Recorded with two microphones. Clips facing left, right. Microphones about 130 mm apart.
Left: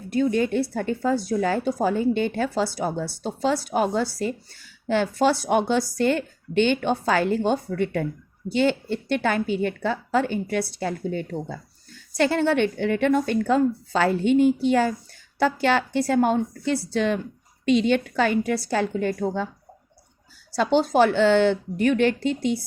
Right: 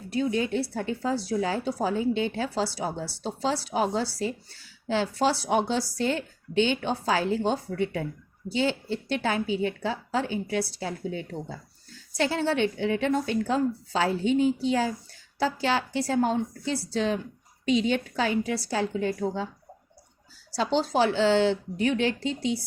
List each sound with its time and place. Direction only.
0.1 s a woman's voice: 50° left (ahead or behind)
20.6 s speech: 55° left (ahead or behind)